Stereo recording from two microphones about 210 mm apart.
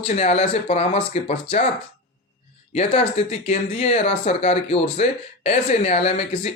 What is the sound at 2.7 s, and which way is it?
Speech, 30° left (ahead or behind).